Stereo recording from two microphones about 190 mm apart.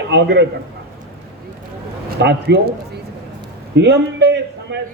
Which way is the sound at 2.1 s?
60° right (ahead or behind).